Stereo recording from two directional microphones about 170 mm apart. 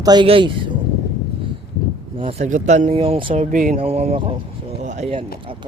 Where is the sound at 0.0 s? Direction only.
25° right (ahead or behind).